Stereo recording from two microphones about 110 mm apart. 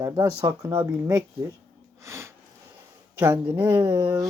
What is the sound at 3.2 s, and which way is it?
Speech, 20° right (ahead or behind).